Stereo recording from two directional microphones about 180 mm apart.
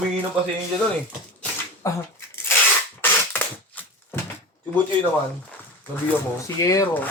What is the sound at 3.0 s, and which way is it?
Crushing, 10° left (ahead or behind).